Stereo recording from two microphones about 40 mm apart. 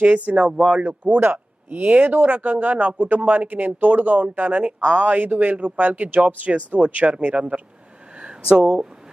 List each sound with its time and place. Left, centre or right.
0.0 s speech: right
4.8 s speech: right
5.0 s speech: right
8.1 s a sound: right
8.6 s speech: centre